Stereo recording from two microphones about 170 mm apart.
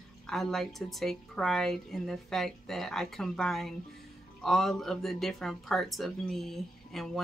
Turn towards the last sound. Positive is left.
turn(degrees=0)  # may be behind; listen again after turning